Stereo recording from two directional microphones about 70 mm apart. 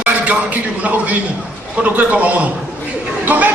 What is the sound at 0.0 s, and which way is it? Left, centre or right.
A man's voice, right.